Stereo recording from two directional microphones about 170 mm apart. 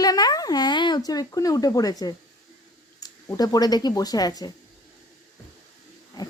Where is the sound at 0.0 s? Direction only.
20° left (ahead or behind).